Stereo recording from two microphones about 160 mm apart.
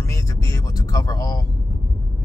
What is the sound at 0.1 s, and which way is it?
Speech, 20° left (ahead or behind).